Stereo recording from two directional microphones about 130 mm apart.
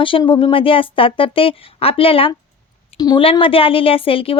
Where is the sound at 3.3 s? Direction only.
45° left (ahead or behind).